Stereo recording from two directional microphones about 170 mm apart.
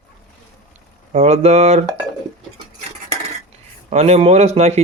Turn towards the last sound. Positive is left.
turn(degrees=-40)  # may be behind; listen again after turning